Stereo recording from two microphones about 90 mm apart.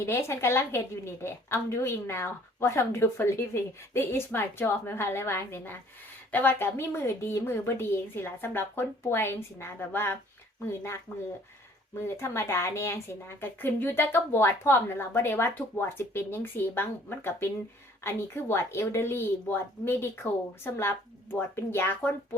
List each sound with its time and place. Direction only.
0.0 s a woman's voice: 30° left (ahead or behind)
12.0 s a woman's voice: 30° left (ahead or behind)